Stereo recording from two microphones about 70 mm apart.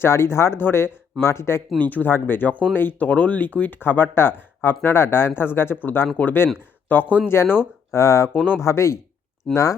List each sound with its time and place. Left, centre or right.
0.0 s speech: left
1.9 s speech: left
7.9 s speech: left
9.5 s speech: centre